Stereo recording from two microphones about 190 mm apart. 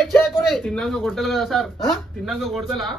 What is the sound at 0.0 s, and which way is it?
A man's voice, centre (ahead or behind).